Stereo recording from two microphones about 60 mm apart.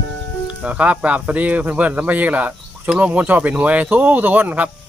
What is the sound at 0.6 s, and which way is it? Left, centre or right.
Speech, right.